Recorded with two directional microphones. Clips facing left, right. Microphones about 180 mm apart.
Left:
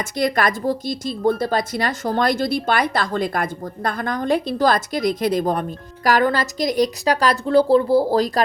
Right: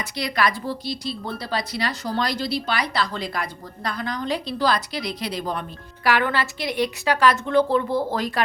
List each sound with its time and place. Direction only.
0.0 s a woman's voice: 50° left (ahead or behind)